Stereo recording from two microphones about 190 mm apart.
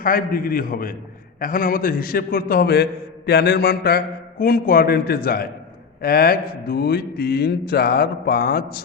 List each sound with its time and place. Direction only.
0.0 s a man's voice: 50° left (ahead or behind)